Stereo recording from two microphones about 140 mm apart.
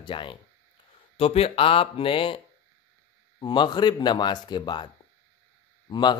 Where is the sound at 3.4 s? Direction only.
35° left (ahead or behind).